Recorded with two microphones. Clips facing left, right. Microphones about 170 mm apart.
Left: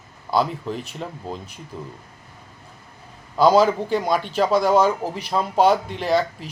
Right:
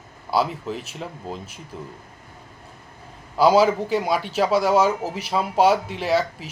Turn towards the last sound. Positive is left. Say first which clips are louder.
# left 1 dB
turn(degrees=-5)  # may be behind; listen again after turning